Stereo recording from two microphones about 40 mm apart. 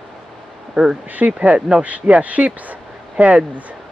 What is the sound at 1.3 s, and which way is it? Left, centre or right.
Speech, right.